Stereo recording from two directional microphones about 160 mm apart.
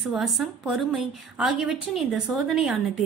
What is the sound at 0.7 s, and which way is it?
A woman's voice, 5° right (ahead or behind).